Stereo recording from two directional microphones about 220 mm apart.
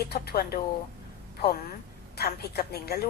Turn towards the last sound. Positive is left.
turn(degrees=45)  # may be behind; listen again after turning